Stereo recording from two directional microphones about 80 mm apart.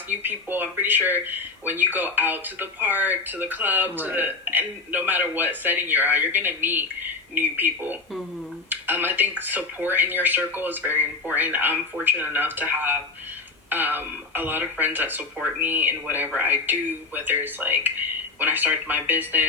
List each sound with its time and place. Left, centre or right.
0.1 s speech: right